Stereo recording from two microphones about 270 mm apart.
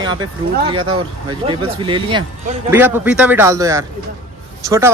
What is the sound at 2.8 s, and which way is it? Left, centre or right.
Speech, centre.